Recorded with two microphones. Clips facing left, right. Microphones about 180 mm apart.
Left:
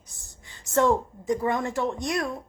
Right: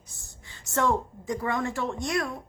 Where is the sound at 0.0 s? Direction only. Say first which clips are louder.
Right 1 dB; 15° left (ahead or behind).